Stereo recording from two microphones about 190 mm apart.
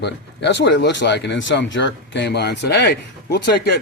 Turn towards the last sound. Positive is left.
turn(degrees=60)  # may be behind; listen again after turning